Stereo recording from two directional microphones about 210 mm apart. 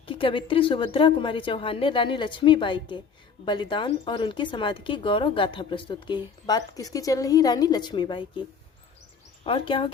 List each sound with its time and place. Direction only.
0.0 s speech: 25° left (ahead or behind)